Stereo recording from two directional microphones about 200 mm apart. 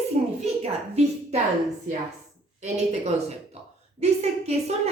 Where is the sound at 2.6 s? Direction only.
35° right (ahead or behind).